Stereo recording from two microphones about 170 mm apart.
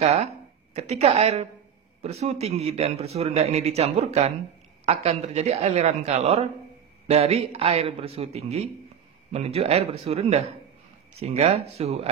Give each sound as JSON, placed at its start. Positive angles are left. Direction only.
{"t": 0.0, "sound": "speech", "side_deg": -40}